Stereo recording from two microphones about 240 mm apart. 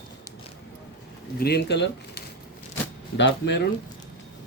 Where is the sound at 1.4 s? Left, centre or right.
Left.